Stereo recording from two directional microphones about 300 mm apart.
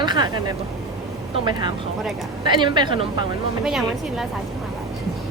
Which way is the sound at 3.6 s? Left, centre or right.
Centre.